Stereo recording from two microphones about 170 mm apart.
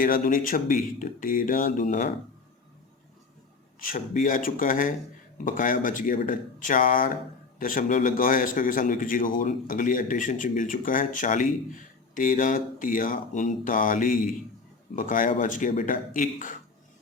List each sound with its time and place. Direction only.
0.0 s a man's voice: 55° left (ahead or behind)
3.8 s a man's voice: 55° left (ahead or behind)